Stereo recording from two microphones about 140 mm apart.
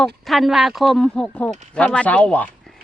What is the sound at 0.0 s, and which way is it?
Speech, centre (ahead or behind).